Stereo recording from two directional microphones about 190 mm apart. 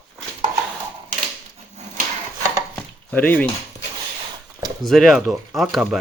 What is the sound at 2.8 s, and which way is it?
Chopping, 5° left (ahead or behind).